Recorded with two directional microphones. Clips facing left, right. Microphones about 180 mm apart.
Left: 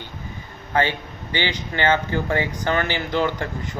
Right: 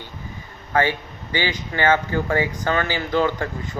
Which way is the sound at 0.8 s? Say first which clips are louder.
Right 1 dB; 20° left (ahead or behind).